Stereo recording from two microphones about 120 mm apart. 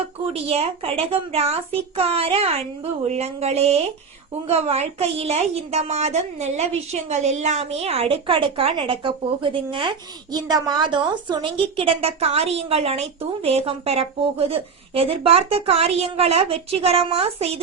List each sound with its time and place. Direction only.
0.4 s a woman's voice: 55° right (ahead or behind)
10.3 s a woman's voice: 35° right (ahead or behind); by 17.6 s 55° right (ahead or behind)